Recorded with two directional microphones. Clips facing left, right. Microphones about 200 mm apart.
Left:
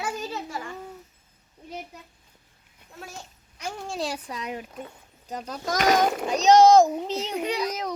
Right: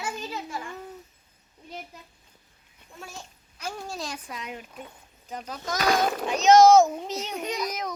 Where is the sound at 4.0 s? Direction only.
35° left (ahead or behind).